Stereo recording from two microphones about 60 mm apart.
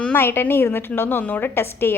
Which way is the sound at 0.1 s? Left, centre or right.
Left.